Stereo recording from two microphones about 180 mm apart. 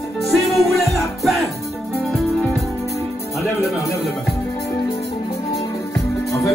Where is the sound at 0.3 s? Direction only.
Centre (ahead or behind).